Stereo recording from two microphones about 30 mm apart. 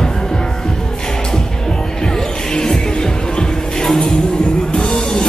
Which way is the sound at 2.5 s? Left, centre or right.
Left.